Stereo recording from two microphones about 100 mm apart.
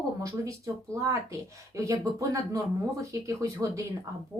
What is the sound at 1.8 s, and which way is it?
Speech, 35° right (ahead or behind).